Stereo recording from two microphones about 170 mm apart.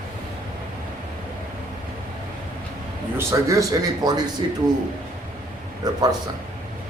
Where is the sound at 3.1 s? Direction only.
20° right (ahead or behind).